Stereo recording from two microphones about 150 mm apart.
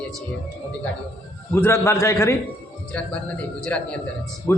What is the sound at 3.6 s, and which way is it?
Speech, 5° left (ahead or behind).